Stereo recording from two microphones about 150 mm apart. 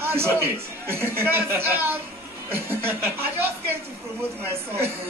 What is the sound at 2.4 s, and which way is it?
A man's voice, 15° right (ahead or behind).